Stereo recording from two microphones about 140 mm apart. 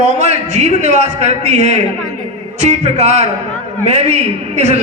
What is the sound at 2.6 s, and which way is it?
A man's voice, 55° right (ahead or behind).